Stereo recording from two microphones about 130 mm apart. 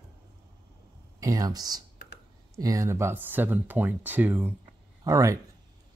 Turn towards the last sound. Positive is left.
turn(degrees=-25)  # may be behind; listen again after turning